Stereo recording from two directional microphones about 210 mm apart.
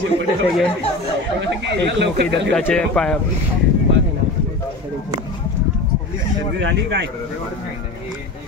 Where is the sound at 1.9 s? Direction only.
55° right (ahead or behind).